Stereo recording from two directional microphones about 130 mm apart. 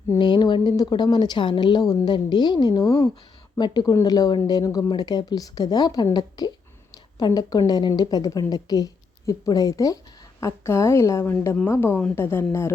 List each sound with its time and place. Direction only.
0.2 s a woman's voice: 35° left (ahead or behind); by 12.7 s 20° left (ahead or behind)